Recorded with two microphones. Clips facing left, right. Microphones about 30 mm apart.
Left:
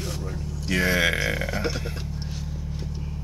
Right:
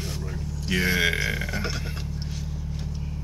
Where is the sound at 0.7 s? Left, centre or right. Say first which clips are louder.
Left 1 dB; centre.